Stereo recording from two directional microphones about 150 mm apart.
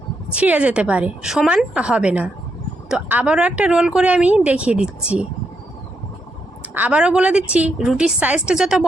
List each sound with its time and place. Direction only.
0.3 s speech: 10° right (ahead or behind)
6.7 s speech: 10° right (ahead or behind)